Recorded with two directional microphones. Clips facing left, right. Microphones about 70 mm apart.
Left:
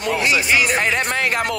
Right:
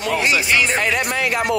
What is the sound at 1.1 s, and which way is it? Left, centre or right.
Speech, left.